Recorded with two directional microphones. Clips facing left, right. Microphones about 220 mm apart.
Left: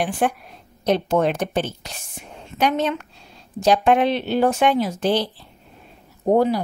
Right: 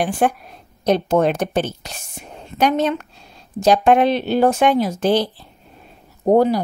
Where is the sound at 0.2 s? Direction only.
45° right (ahead or behind).